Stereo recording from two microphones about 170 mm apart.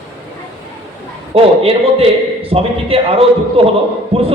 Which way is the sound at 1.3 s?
35° right (ahead or behind).